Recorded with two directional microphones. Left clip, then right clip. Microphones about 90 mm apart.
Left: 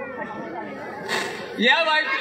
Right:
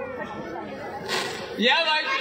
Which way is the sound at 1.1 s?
40° right (ahead or behind).